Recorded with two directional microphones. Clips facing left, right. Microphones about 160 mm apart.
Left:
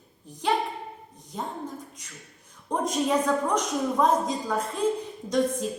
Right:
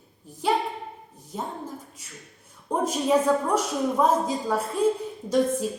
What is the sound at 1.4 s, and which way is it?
A woman's voice, 5° right (ahead or behind).